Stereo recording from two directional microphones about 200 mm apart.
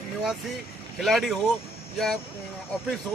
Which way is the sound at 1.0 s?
Centre (ahead or behind).